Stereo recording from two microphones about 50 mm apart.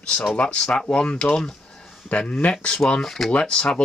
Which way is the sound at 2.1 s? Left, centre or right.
Left.